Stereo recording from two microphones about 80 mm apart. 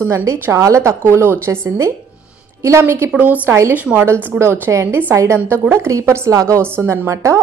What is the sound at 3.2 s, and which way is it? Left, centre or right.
Speech, right.